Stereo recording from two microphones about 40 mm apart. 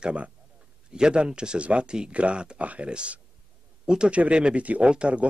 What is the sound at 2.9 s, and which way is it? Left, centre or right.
Speech, right.